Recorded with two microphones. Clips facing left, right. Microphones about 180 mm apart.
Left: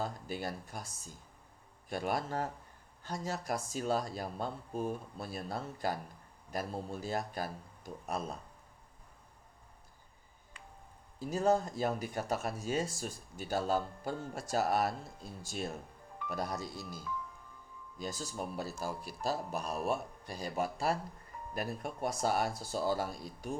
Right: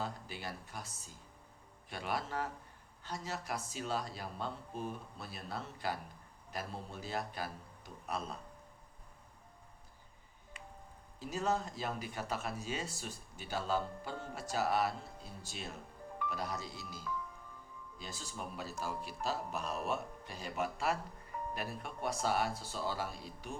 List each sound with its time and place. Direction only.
0.0 s speech: 45° left (ahead or behind)
11.3 s speech: 45° left (ahead or behind)